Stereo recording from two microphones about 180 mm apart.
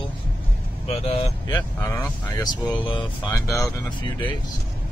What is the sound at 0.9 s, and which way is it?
Speech, 35° left (ahead or behind).